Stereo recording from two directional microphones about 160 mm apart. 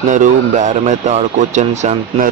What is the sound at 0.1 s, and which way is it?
Speech, 50° right (ahead or behind).